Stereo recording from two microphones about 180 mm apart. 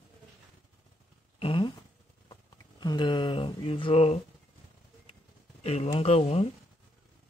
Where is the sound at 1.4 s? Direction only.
30° left (ahead or behind).